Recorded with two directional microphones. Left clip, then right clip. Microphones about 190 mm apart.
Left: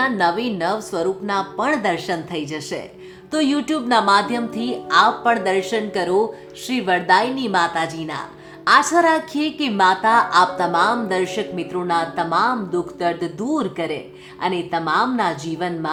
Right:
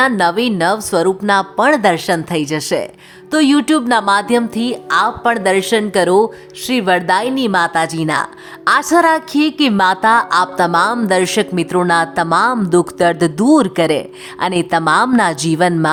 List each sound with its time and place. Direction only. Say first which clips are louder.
0.0 s a woman's voice: right 6 dB; 35° right (ahead or behind); by 15.9 s 55° right (ahead or behind)